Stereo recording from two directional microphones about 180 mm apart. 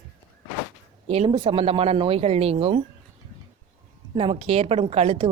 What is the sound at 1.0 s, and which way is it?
Speech, 35° right (ahead or behind).